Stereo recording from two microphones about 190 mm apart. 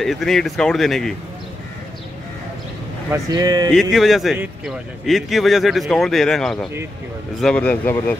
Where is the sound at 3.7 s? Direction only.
Centre (ahead or behind).